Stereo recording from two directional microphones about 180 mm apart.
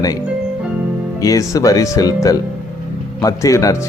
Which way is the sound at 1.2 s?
20° left (ahead or behind).